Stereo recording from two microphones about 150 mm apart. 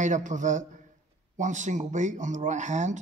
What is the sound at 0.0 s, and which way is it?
A man's voice, 55° right (ahead or behind).